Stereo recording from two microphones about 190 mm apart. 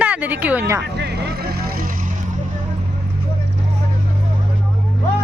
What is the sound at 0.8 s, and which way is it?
Vehicle, 60° right (ahead or behind).